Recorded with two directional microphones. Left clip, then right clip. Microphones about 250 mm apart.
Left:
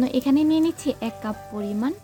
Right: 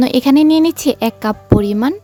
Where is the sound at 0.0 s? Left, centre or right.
Right.